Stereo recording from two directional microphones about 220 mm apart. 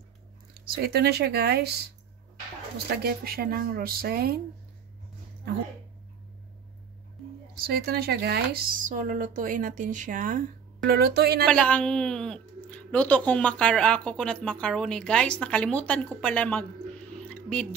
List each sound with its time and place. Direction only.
0.7 s speech: 45° right (ahead or behind)
2.9 s speech: 45° right (ahead or behind)
7.6 s speech: 45° right (ahead or behind)
11.4 s speech: 5° left (ahead or behind)
17.3 s a sound: 5° left (ahead or behind)